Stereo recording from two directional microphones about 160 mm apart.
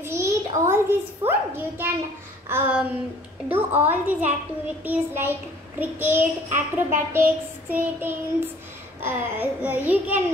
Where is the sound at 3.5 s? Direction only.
10° right (ahead or behind).